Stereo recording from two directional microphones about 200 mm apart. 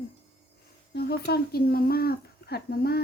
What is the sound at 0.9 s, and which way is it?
Speech, 50° left (ahead or behind).